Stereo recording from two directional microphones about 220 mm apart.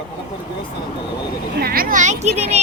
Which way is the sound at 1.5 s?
45° right (ahead or behind).